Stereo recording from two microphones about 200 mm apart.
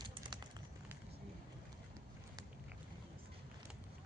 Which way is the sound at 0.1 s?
20° right (ahead or behind).